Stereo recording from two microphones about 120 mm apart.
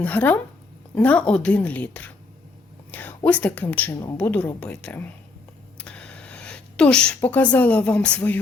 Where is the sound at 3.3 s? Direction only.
10° left (ahead or behind).